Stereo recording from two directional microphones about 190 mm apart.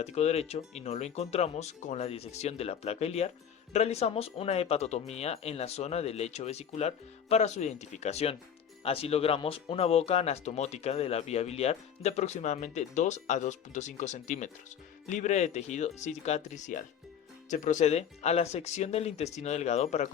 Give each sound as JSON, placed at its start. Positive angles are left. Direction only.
{"t": 0.0, "sound": "speech", "side_deg": 35}